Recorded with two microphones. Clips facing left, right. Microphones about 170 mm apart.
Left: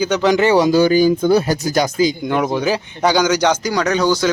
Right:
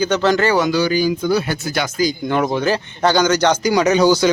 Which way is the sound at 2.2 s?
5° left (ahead or behind).